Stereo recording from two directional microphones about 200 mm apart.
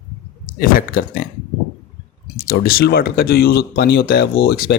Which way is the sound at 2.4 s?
50° left (ahead or behind).